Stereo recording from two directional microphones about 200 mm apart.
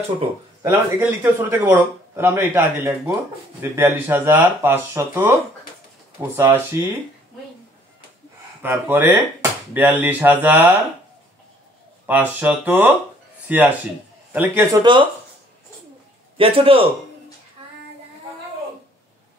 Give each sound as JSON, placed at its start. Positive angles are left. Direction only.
{"t": 0.6, "sound": "speech", "side_deg": -15}
{"t": 8.6, "sound": "speech", "side_deg": -10}
{"t": 12.1, "sound": "speech", "side_deg": -10}
{"t": 16.3, "sound": "a man's voice", "side_deg": -25}